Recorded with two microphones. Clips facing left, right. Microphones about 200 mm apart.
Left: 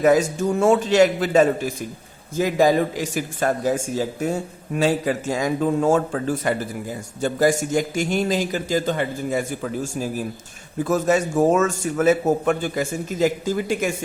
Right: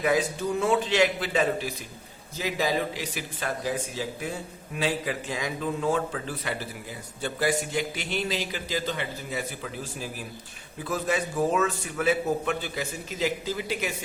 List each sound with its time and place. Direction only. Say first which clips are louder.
0.0 s speech: left 8 dB; 45° left (ahead or behind)